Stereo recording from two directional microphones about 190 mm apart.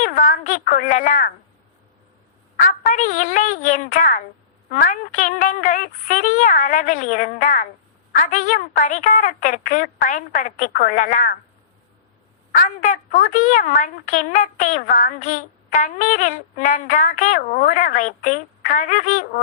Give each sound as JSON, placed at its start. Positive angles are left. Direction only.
{"t": 0.0, "sound": "a woman's voice", "side_deg": 45}
{"t": 2.6, "sound": "a woman's voice", "side_deg": 40}
{"t": 12.5, "sound": "a woman's voice", "side_deg": 45}